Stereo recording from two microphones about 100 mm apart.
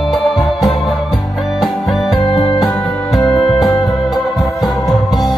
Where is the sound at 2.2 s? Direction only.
55° left (ahead or behind).